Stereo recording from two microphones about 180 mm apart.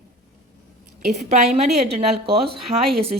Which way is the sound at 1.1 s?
40° right (ahead or behind).